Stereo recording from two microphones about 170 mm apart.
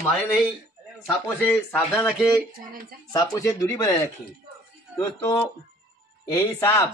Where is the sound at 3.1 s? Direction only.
20° left (ahead or behind).